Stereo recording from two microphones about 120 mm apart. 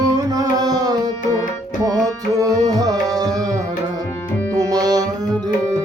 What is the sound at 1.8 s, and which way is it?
Music, 30° right (ahead or behind).